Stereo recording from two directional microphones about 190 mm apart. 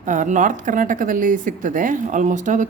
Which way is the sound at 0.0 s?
40° right (ahead or behind).